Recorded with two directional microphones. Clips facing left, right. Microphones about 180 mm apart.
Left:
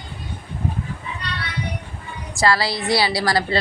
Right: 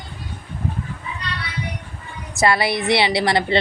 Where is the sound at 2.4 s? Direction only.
20° right (ahead or behind).